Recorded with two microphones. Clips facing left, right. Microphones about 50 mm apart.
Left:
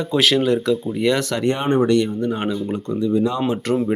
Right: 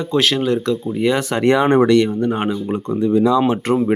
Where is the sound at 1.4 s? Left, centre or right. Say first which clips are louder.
Right 5 dB; right.